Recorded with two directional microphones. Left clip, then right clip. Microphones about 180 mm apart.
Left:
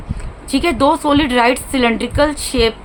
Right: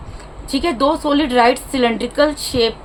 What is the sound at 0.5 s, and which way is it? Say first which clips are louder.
A woman's voice: left 3 dB; 20° left (ahead or behind).